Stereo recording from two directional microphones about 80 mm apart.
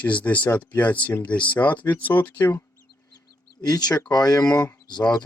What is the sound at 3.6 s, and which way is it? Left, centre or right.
Speech, left.